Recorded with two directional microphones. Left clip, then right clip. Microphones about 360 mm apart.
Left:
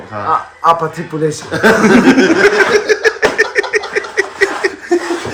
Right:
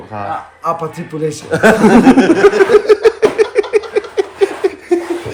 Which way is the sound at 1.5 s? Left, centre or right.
Right.